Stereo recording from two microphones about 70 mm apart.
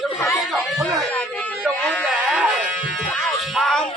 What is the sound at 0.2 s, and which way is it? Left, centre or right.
Chatter, left.